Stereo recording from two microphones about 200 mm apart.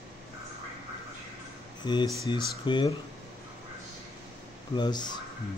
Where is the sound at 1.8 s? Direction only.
20° left (ahead or behind).